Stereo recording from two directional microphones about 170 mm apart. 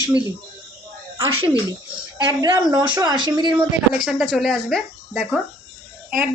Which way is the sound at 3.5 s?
Centre (ahead or behind).